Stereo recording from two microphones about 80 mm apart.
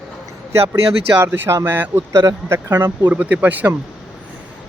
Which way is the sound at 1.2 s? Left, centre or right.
Right.